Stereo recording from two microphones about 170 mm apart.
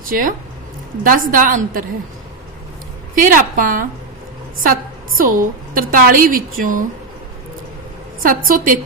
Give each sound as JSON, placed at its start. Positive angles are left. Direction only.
{"t": 0.1, "sound": "a woman's voice", "side_deg": -50}
{"t": 3.2, "sound": "a woman's voice", "side_deg": -50}
{"t": 5.1, "sound": "a woman's voice", "side_deg": -55}
{"t": 8.2, "sound": "a woman's voice", "side_deg": -55}